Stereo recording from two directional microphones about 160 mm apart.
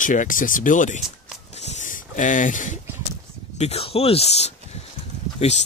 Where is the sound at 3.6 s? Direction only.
40° left (ahead or behind).